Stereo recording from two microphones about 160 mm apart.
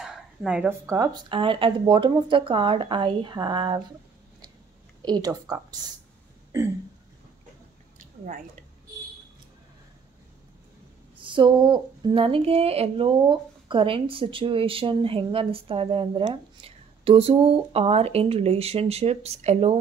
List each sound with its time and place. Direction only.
0.0 s a sound: centre (ahead or behind)
0.8 s speech: 20° right (ahead or behind)
5.0 s speech: 25° right (ahead or behind)
11.2 s speech: 30° right (ahead or behind)